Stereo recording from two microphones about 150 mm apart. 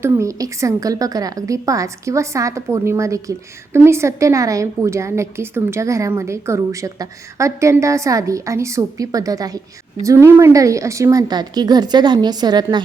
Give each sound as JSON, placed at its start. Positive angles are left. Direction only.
{"t": 0.0, "sound": "a woman's voice", "side_deg": -20}